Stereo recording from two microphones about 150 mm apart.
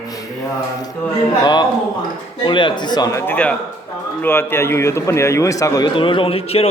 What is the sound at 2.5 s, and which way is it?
A man's voice, 35° left (ahead or behind).